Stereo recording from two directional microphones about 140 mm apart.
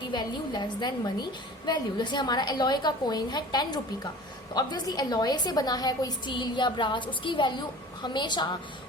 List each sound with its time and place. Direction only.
0.1 s a woman's voice: 30° left (ahead or behind)